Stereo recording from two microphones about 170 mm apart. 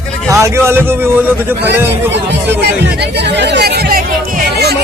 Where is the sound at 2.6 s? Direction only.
85° right; by 4.7 s 65° right (ahead or behind).